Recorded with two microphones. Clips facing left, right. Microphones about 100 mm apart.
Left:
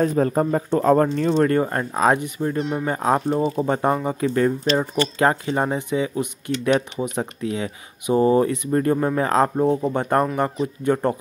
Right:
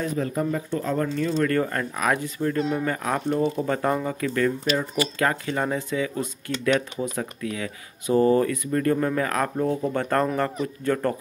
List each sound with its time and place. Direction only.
0.0 s speech: 40° left (ahead or behind)
1.5 s speech: 25° left (ahead or behind)